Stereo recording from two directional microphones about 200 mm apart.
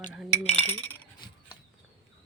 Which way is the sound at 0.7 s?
10° left (ahead or behind).